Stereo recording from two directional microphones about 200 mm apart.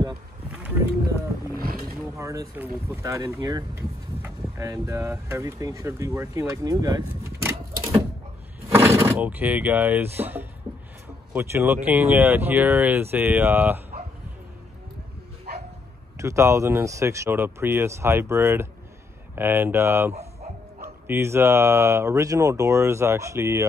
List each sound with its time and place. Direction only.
0.5 s roaring cats: 10° right (ahead or behind)
2.1 s speech: 15° right (ahead or behind)
15.5 s bow-wow: 50° right (ahead or behind)
16.2 s speech: 15° right (ahead or behind)